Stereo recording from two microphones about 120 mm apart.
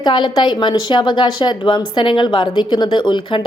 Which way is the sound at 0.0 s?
40° left (ahead or behind).